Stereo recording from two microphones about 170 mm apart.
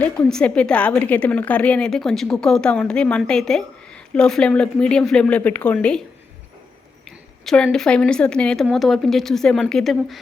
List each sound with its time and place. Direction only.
0.0 s a woman's voice: 5° left (ahead or behind)
7.4 s a woman's voice: 5° left (ahead or behind)